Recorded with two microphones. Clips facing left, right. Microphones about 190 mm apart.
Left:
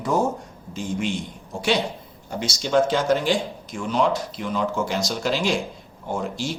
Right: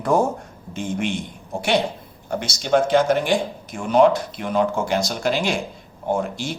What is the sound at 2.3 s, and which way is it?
Speech, 55° right (ahead or behind).